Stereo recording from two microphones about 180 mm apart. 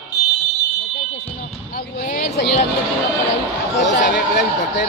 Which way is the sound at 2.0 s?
55° left (ahead or behind).